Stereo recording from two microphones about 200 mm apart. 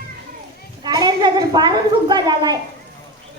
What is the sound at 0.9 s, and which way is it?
A woman's voice, 20° right (ahead or behind).